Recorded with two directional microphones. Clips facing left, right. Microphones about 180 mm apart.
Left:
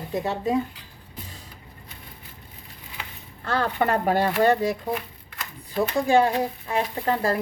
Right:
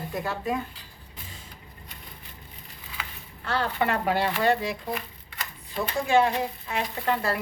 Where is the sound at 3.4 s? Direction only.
45° left (ahead or behind).